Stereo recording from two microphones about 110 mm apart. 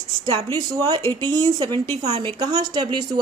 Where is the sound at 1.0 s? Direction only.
25° left (ahead or behind).